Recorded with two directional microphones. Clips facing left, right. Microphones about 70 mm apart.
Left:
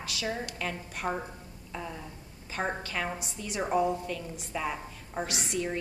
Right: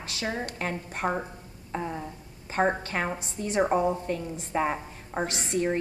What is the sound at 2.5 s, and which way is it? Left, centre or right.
A woman's voice, right.